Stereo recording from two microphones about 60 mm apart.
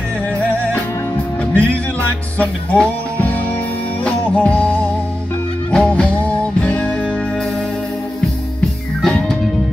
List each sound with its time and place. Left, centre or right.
1.5 s music: left
5.7 s music: centre
9.0 s music: centre